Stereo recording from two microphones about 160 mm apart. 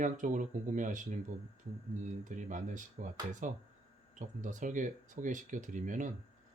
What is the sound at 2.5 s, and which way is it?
Speech, 55° right (ahead or behind).